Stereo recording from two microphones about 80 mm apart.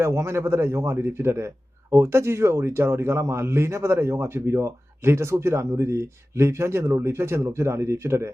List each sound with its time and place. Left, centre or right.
0.0 s a man's voice: right